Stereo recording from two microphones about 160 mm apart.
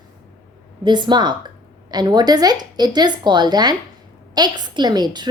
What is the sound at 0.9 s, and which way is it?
A woman's voice, 30° right (ahead or behind).